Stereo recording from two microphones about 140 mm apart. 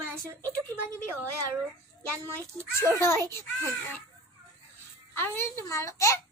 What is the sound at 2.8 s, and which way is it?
Speech, 20° left (ahead or behind).